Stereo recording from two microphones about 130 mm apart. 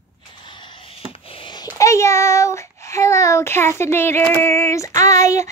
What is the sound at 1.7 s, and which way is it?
Child singing, 25° left (ahead or behind).